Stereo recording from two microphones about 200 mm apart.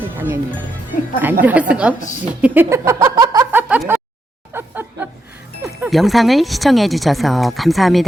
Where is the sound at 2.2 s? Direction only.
10° right (ahead or behind).